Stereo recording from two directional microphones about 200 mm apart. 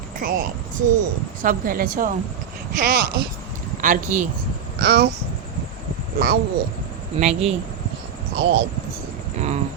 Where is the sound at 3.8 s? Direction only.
40° right (ahead or behind).